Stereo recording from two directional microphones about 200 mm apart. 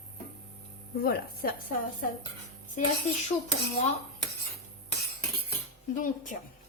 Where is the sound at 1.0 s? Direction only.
50° left (ahead or behind).